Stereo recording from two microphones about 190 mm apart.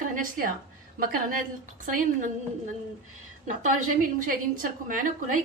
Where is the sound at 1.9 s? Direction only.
40° right (ahead or behind).